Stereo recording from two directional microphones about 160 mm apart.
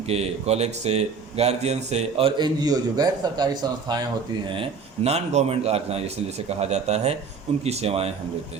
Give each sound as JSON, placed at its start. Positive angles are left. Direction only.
{"t": 0.0, "sound": "speech", "side_deg": -40}